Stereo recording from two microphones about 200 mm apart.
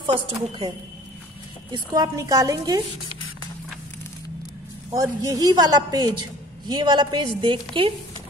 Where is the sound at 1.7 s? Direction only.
20° right (ahead or behind).